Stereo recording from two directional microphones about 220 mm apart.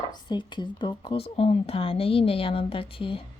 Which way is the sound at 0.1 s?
20° left (ahead or behind).